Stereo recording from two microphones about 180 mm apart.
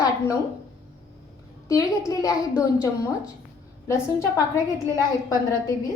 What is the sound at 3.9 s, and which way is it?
Speech, 15° left (ahead or behind).